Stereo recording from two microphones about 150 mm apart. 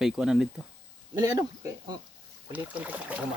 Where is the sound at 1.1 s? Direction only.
25° right (ahead or behind).